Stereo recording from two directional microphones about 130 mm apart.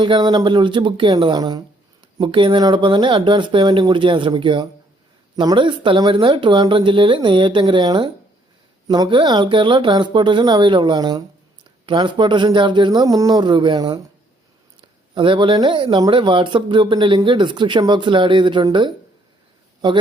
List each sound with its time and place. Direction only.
0.0 s speech: 35° right (ahead or behind)
14.8 s a sound: 40° right (ahead or behind)
15.6 s speech: 40° right (ahead or behind)